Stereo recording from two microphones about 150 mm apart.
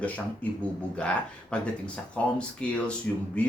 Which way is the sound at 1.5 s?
5° left (ahead or behind).